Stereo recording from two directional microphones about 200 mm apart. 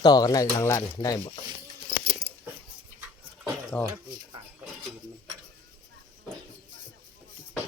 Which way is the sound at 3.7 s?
5° left (ahead or behind).